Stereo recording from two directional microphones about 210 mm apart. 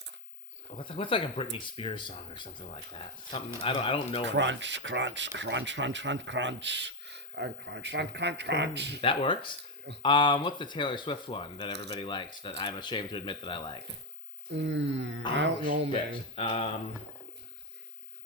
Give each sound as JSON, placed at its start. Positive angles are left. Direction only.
{"t": 0.8, "sound": "speech", "side_deg": 25}
{"t": 4.3, "sound": "speech", "side_deg": -60}
{"t": 9.0, "sound": "speech", "side_deg": 25}
{"t": 11.7, "sound": "speech", "side_deg": -55}
{"t": 11.9, "sound": "speech", "side_deg": 25}
{"t": 14.5, "sound": "speech", "side_deg": -60}
{"t": 16.3, "sound": "speech", "side_deg": 25}